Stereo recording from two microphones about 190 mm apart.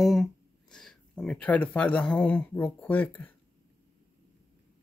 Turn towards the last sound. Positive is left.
turn(degrees=10)  # may be behind; listen again after turning